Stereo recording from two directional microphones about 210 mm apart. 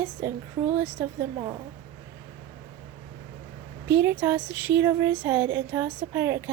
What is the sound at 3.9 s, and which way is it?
A woman's voice, 10° right (ahead or behind).